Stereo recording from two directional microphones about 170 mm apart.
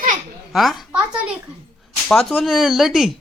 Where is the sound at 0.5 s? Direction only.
Centre (ahead or behind).